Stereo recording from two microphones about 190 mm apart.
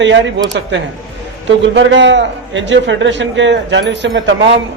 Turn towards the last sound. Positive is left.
turn(degrees=-70)  # may be behind; listen again after turning